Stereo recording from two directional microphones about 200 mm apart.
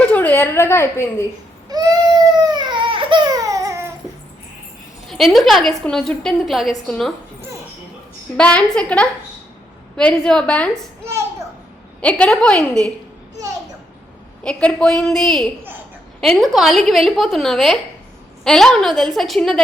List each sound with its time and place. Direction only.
0.1 s a woman's voice: 10° left (ahead or behind)
1.7 s baby cry: 20° right (ahead or behind)
5.0 s a woman's voice: centre (ahead or behind)
8.4 s a woman's voice: 5° left (ahead or behind)
12.0 s a woman's voice: 5° left (ahead or behind)
14.4 s a woman's voice: 5° left (ahead or behind)